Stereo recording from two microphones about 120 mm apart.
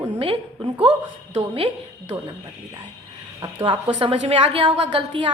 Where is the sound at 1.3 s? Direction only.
55° right (ahead or behind).